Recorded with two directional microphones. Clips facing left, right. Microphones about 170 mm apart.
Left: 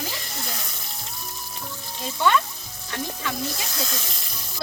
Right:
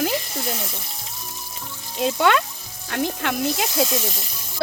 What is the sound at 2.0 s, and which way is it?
A woman's voice, 80° right.